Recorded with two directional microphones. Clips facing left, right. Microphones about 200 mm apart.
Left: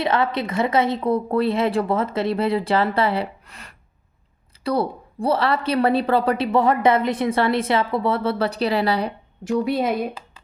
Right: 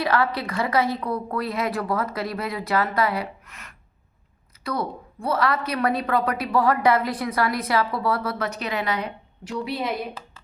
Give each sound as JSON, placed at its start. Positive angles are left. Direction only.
{"t": 0.0, "sound": "a woman's voice", "side_deg": 25}